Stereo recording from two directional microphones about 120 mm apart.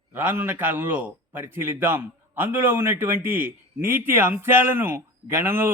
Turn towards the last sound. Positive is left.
turn(degrees=-20)  # may be behind; listen again after turning